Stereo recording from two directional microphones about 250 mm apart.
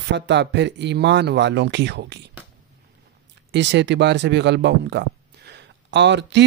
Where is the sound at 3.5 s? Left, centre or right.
Right.